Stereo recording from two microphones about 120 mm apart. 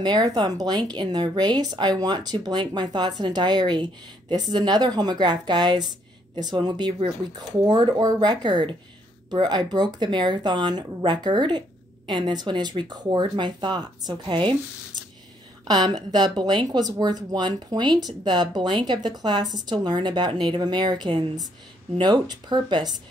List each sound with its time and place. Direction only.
0.0 s speech: 35° right (ahead or behind)
15.6 s speech: 35° right (ahead or behind)